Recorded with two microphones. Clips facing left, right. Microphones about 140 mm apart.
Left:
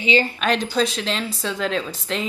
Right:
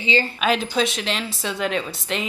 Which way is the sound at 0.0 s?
15° left (ahead or behind).